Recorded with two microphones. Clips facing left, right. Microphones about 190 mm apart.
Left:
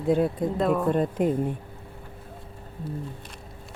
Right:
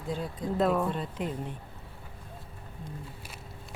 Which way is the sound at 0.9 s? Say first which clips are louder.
Left 11 dB; 50° left (ahead or behind).